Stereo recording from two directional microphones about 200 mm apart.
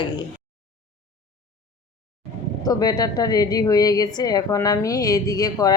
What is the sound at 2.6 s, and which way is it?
A woman's voice, 20° left (ahead or behind).